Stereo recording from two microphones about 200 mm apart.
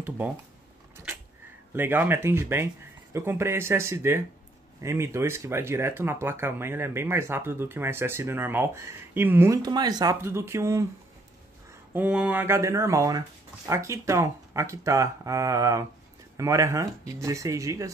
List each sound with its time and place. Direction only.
1.7 s speech: 10° right (ahead or behind)
11.9 s speech: 5° right (ahead or behind)